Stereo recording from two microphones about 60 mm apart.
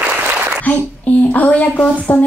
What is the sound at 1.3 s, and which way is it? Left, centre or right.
Speech, left.